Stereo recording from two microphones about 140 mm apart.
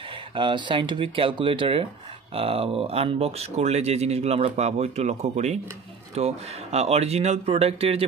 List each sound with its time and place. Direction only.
0.3 s speech: 35° right (ahead or behind)